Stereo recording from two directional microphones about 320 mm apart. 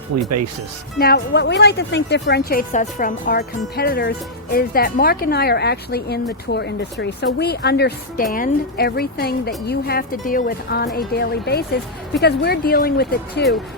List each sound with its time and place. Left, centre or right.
0.1 s speech: right
0.9 s a woman's voice: left